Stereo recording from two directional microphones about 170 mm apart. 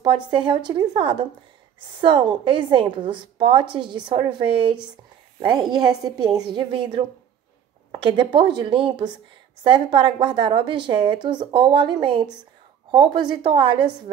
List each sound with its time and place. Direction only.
0.0 s a woman's voice: 30° right (ahead or behind)
8.0 s a woman's voice: 30° right (ahead or behind)